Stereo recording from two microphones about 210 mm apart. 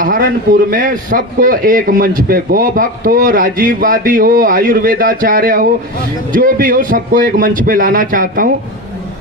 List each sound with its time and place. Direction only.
0.0 s a man's voice: 40° right (ahead or behind)